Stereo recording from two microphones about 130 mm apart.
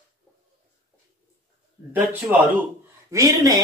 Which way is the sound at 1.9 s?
15° right (ahead or behind).